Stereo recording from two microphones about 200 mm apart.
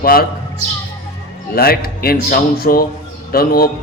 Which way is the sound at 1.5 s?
50° left (ahead or behind).